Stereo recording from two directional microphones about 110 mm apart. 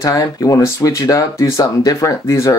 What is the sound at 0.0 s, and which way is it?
Speech, 35° left (ahead or behind).